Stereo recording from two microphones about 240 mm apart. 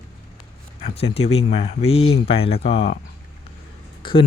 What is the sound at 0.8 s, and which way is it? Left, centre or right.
Speech, left.